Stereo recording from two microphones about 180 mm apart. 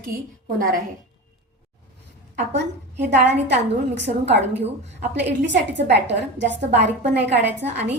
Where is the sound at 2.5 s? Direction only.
75° right (ahead or behind).